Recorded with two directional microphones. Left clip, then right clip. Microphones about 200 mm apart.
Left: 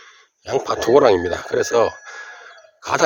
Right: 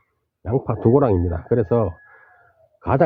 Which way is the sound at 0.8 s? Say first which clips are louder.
Left 4 dB; 20° left (ahead or behind).